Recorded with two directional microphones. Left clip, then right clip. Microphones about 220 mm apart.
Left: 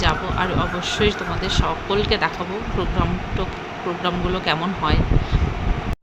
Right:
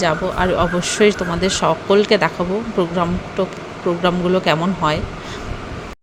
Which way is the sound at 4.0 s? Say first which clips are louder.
Right 7 dB; 30° right (ahead or behind).